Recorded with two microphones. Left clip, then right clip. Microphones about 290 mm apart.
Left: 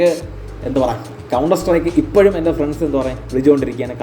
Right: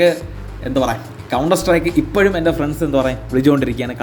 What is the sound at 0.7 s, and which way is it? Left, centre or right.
A man's voice, right.